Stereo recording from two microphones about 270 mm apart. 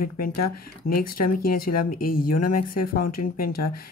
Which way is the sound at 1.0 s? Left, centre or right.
Left.